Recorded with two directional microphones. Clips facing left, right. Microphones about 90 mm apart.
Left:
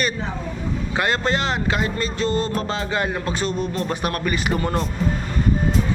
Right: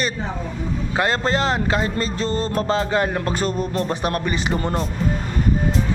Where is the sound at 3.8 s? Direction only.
30° right (ahead or behind).